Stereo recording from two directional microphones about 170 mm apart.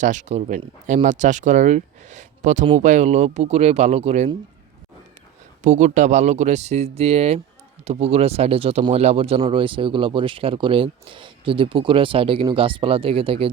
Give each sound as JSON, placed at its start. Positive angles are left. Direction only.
{"t": 0.0, "sound": "speech", "side_deg": -45}
{"t": 5.6, "sound": "speech", "side_deg": -45}